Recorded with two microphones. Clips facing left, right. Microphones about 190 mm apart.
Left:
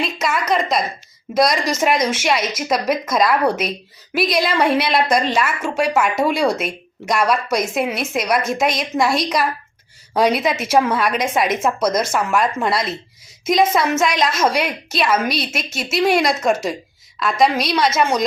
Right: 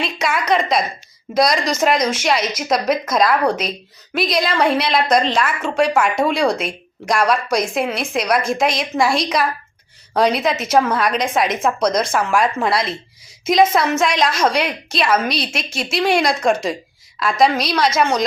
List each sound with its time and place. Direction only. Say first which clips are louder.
0.0 s a woman's voice: even; centre (ahead or behind)